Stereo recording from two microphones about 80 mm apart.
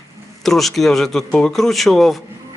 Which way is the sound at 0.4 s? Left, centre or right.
Centre.